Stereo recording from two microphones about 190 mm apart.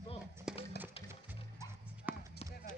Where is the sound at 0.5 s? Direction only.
5° right (ahead or behind).